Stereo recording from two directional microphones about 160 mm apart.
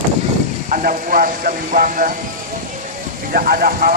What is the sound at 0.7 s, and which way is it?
Speech, 55° right (ahead or behind).